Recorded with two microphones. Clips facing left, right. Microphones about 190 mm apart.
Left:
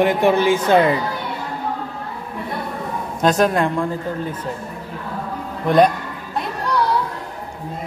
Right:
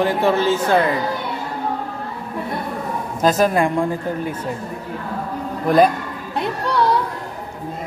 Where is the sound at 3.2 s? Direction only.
Centre (ahead or behind).